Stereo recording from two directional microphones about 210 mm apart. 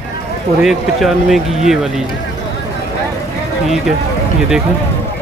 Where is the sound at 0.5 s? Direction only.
Centre (ahead or behind).